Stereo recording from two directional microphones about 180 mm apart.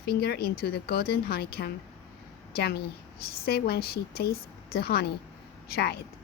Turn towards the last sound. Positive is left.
turn(degrees=60)  # may be behind; listen again after turning